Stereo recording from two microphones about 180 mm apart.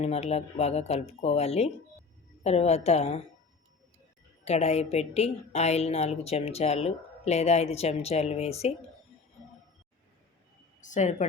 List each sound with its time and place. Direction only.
0.0 s a woman's voice: 35° left (ahead or behind)
4.4 s a woman's voice: 35° left (ahead or behind)
10.8 s a woman's voice: 45° left (ahead or behind)